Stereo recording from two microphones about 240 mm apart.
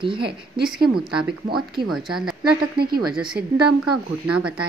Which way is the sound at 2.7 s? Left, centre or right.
Right.